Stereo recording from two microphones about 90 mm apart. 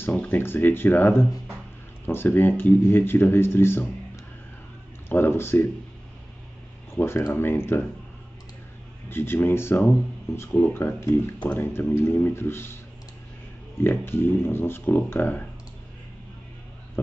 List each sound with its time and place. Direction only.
0.0 s speech: 20° left (ahead or behind)
5.1 s speech: 25° left (ahead or behind)
7.0 s speech: 30° left (ahead or behind)
9.1 s speech: 25° left (ahead or behind)
13.7 s speech: 25° left (ahead or behind)